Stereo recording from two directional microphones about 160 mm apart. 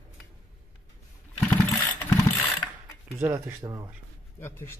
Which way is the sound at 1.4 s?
15° left (ahead or behind).